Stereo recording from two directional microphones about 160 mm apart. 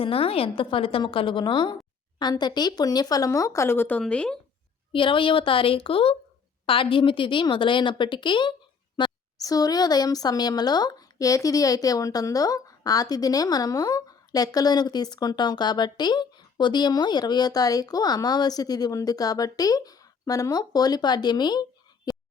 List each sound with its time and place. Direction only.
0.0 s a woman's voice: 35° left (ahead or behind); by 4.4 s 5° left (ahead or behind)
4.9 s a woman's voice: 30° left (ahead or behind)